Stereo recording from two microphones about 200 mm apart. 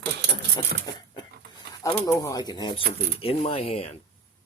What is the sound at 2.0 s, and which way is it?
Speech, 15° left (ahead or behind).